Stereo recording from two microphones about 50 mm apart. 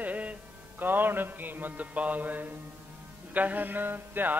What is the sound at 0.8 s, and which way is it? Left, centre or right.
Mantra, right.